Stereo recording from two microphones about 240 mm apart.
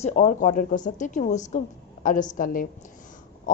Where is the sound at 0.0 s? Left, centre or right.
Left.